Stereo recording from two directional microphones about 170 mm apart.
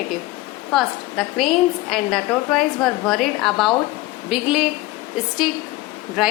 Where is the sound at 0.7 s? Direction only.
Centre (ahead or behind).